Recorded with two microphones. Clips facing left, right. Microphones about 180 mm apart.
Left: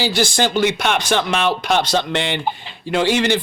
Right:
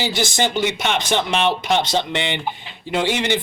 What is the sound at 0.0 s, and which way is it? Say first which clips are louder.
A man's voice: left 3 dB; 20° right (ahead or behind).